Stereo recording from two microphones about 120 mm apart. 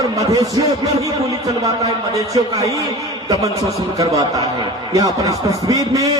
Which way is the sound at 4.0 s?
30° right (ahead or behind).